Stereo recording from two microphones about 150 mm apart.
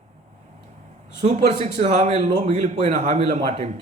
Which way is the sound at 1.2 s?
50° right (ahead or behind).